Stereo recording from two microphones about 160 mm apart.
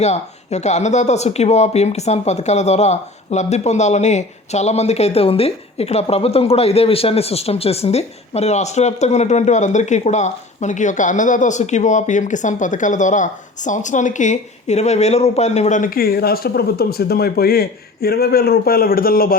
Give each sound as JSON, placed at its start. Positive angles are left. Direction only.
{"t": 0.0, "sound": "speech", "side_deg": 45}